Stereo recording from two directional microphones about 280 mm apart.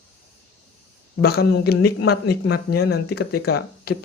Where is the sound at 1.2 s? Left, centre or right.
Left.